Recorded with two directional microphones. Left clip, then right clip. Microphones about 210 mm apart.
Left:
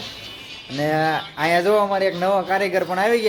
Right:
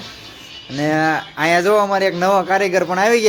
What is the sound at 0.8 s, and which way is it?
Speech, 15° right (ahead or behind).